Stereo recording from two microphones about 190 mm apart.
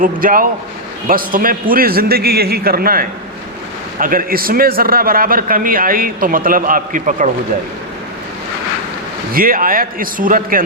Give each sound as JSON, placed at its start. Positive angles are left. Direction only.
{"t": 0.0, "sound": "a man's voice", "side_deg": -45}
{"t": 9.3, "sound": "a man's voice", "side_deg": -50}